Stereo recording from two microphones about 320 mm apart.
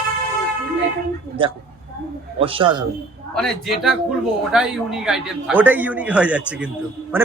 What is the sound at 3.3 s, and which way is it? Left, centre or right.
A man's voice, centre.